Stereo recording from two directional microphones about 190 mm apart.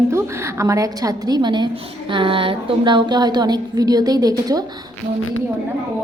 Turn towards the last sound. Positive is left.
turn(degrees=-20)  # may be behind; listen again after turning